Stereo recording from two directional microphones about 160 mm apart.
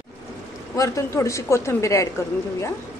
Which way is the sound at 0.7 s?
20° left (ahead or behind).